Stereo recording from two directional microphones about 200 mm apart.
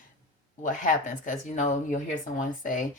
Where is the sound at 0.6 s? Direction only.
40° left (ahead or behind).